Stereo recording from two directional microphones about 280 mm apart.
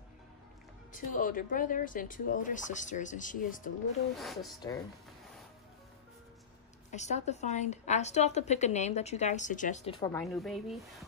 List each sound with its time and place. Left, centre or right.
0.9 s a woman's voice: left
4.2 s speech: centre
6.9 s a woman's voice: left
10.1 s speech: centre